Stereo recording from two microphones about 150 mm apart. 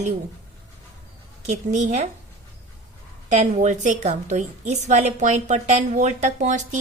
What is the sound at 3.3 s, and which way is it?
A woman's voice, 50° right (ahead or behind).